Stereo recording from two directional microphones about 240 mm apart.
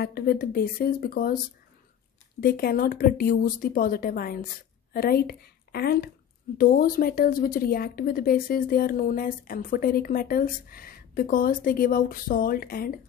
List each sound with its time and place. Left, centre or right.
0.0 s a woman's voice: left
2.4 s a woman's voice: left